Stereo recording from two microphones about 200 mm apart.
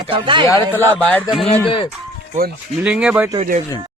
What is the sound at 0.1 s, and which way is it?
Speech, 25° right (ahead or behind).